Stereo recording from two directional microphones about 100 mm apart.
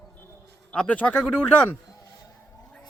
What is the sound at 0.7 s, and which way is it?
Speech, 10° left (ahead or behind).